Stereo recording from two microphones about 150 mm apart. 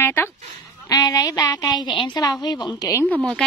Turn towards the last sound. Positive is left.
turn(degrees=0)  # may be behind; listen again after turning